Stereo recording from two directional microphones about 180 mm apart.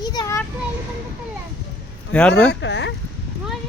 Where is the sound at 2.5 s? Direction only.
70° left (ahead or behind).